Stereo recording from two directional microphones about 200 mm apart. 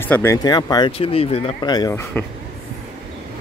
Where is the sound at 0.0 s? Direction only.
10° left (ahead or behind).